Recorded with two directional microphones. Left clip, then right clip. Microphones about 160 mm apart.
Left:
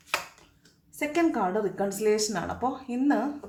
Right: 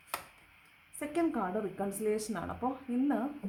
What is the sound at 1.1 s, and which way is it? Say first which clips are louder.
Speech: left 7 dB; 20° right (ahead or behind).